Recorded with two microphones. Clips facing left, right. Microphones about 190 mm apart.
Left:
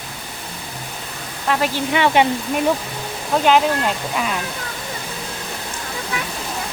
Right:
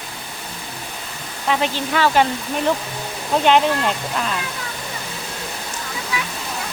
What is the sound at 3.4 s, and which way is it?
Speech, 5° left (ahead or behind).